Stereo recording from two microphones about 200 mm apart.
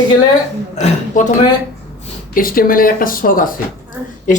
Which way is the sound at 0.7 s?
35° left (ahead or behind).